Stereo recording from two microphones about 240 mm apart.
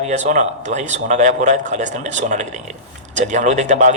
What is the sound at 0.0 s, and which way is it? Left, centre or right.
A man's voice, right.